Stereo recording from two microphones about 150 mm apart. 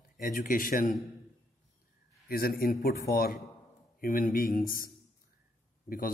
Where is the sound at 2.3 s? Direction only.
90° left.